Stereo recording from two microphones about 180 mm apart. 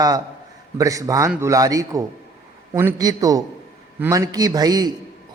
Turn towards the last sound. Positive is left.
turn(degrees=-20)  # may be behind; listen again after turning